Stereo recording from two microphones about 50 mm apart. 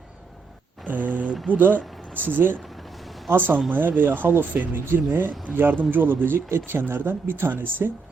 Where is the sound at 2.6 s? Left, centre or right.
Centre.